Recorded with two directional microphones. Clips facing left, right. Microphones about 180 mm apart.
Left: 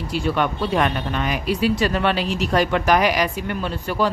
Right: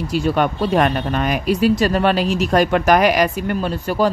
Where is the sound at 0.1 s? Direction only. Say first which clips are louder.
Right 3 dB; 40° right (ahead or behind).